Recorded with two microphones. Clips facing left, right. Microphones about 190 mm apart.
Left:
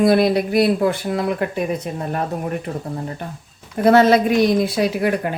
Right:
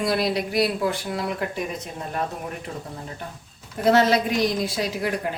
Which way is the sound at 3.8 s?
55° left (ahead or behind).